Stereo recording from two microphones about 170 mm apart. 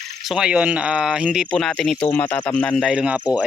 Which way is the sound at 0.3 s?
5° right (ahead or behind).